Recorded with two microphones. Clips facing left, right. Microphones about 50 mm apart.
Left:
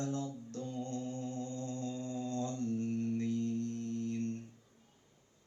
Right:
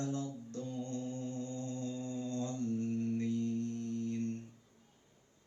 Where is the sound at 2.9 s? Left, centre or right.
Right.